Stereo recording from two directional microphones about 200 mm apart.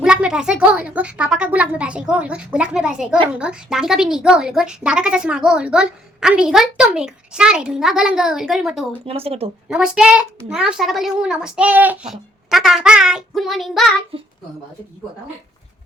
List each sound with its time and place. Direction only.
0.0 s a woman's voice: 5° right (ahead or behind)
9.0 s speech: 30° right (ahead or behind)
9.6 s a woman's voice: 5° right (ahead or behind)
14.1 s speech: 25° right (ahead or behind)